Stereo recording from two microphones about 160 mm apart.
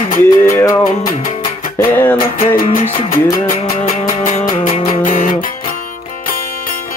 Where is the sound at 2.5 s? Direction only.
60° left (ahead or behind).